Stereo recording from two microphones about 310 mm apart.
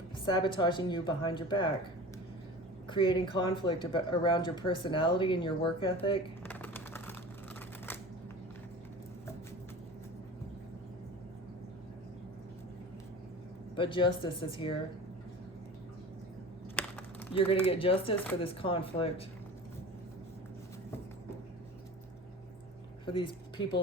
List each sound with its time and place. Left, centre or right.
0.3 s speech: centre
2.9 s speech: centre
6.5 s a sound: centre
13.7 s speech: centre
16.8 s a sound: centre
17.3 s speech: centre
23.0 s speech: centre